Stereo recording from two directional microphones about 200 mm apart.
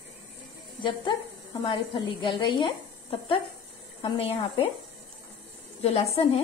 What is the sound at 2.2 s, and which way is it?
A woman's voice, 25° left (ahead or behind).